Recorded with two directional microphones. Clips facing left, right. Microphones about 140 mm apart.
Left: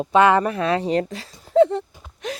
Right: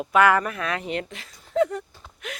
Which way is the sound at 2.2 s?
35° left (ahead or behind).